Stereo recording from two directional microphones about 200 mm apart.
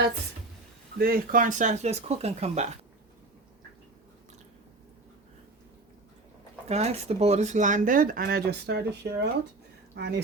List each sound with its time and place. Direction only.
0.9 s speech: 45° right (ahead or behind); by 2.6 s 30° right (ahead or behind)
6.7 s speech: 30° right (ahead or behind); by 10.2 s 55° right (ahead or behind)